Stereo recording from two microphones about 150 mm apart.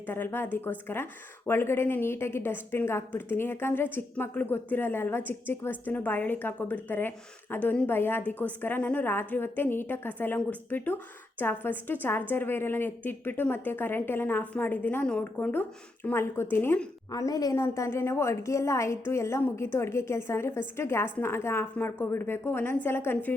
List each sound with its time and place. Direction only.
0.0 s a woman's voice: 15° left (ahead or behind)
17.1 s a woman's voice: 25° left (ahead or behind)